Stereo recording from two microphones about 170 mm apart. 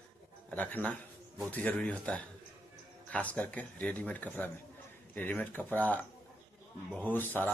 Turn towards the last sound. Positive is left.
turn(degrees=10)  # may be behind; listen again after turning